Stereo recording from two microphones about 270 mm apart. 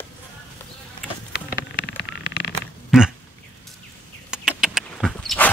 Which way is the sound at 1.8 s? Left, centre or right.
Left.